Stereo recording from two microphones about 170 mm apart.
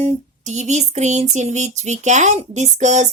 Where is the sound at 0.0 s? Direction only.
45° right (ahead or behind).